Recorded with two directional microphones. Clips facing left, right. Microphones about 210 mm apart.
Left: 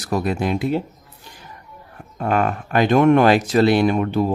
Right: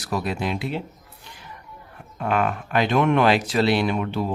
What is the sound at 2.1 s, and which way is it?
Speech, 40° left (ahead or behind).